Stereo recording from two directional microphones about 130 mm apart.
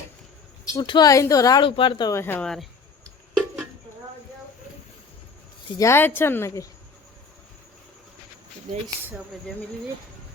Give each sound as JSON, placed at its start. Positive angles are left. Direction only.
{"t": 0.7, "sound": "speech", "side_deg": 35}
{"t": 1.6, "sound": "speech", "side_deg": 40}
{"t": 2.1, "sound": "speech", "side_deg": 15}
{"t": 5.8, "sound": "speech", "side_deg": 20}